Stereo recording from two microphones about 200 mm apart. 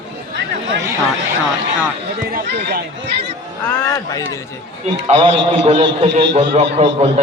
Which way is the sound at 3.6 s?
10° left (ahead or behind).